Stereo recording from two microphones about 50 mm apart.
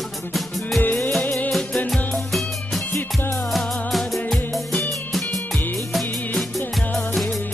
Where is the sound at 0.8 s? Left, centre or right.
Left.